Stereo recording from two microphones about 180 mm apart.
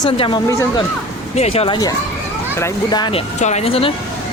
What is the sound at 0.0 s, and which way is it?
Speech, 30° left (ahead or behind).